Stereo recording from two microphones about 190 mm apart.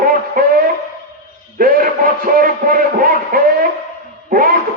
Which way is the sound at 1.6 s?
50° right (ahead or behind).